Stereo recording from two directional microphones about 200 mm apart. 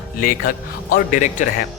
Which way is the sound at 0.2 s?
45° left (ahead or behind).